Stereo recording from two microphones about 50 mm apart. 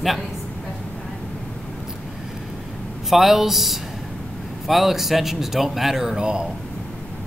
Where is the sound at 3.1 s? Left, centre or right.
Centre.